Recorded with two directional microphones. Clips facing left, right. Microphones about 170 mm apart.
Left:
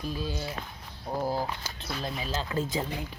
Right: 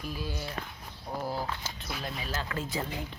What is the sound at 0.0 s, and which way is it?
Speech, 25° left (ahead or behind).